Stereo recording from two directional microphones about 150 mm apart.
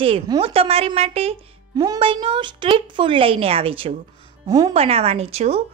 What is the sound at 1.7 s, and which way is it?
Speech, 25° right (ahead or behind).